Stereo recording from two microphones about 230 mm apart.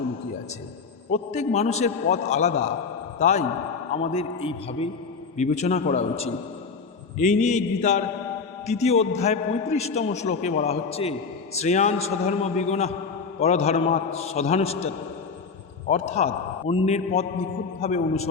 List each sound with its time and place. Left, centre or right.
1.1 s a man's voice: left
7.2 s mantra: left
8.6 s a man's voice: left